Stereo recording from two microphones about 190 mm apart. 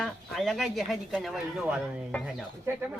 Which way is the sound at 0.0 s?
Centre (ahead or behind).